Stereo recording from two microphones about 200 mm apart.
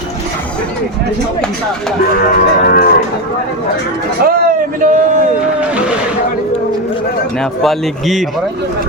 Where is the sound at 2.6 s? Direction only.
45° left (ahead or behind).